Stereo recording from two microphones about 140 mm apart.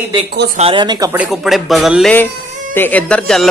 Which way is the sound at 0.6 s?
40° right (ahead or behind).